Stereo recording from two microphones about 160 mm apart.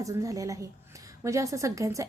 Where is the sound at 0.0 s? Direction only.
20° right (ahead or behind).